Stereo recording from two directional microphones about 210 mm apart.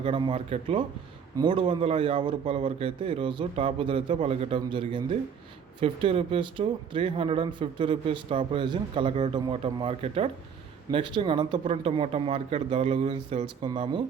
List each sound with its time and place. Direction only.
0.0 s speech: 25° right (ahead or behind)